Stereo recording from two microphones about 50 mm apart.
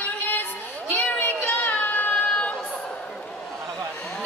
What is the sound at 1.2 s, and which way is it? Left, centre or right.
Child singing, left.